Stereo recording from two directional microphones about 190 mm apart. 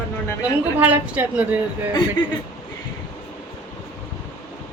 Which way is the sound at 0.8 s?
10° right (ahead or behind).